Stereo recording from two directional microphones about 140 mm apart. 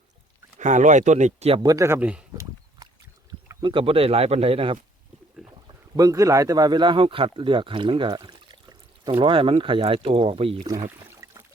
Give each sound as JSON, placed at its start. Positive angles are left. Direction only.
{"t": 0.5, "sound": "speech", "side_deg": -60}
{"t": 1.6, "sound": "a man's voice", "side_deg": -25}
{"t": 2.4, "sound": "a sound", "side_deg": -25}
{"t": 3.6, "sound": "speech", "side_deg": -35}
{"t": 6.0, "sound": "speech", "side_deg": -25}
{"t": 11.0, "sound": "a sound", "side_deg": -20}